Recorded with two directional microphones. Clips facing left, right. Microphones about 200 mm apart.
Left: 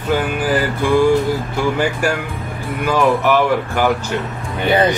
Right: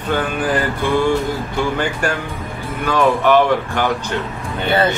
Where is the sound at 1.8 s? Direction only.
10° left (ahead or behind).